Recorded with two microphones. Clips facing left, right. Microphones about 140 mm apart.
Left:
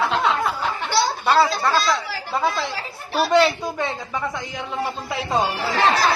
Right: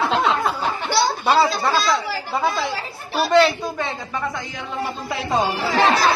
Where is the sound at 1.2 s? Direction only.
15° right (ahead or behind).